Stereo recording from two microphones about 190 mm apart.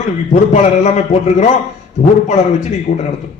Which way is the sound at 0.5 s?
40° left (ahead or behind).